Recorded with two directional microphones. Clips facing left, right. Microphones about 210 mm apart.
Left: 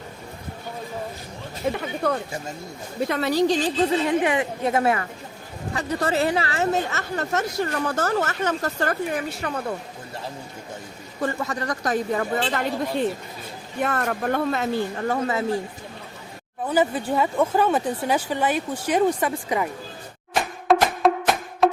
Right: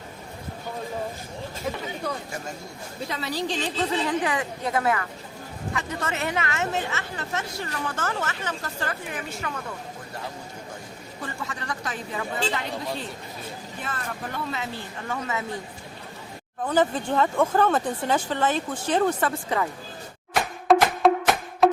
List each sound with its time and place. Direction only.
1.7 s a woman's voice: 25° left (ahead or behind)
3.1 s speech: 55° left (ahead or behind); by 3.8 s 40° left (ahead or behind)
4.0 s a woman's voice: 25° left (ahead or behind); by 9.2 s 50° left (ahead or behind)
9.3 s speech: 35° left (ahead or behind)
11.4 s speech: 40° left (ahead or behind)
13.7 s speech: 60° left (ahead or behind)
15.0 s speech: 35° left (ahead or behind)
16.6 s speech: 10° left (ahead or behind)
20.7 s music: centre (ahead or behind)